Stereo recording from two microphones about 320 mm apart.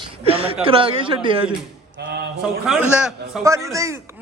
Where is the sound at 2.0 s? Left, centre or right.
Right.